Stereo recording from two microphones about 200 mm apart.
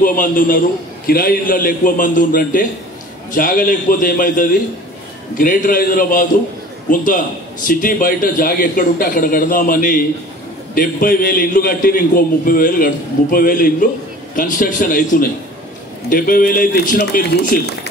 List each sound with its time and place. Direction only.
0.0 s a man's voice: 45° left (ahead or behind)
7.6 s a man's voice: 45° left (ahead or behind)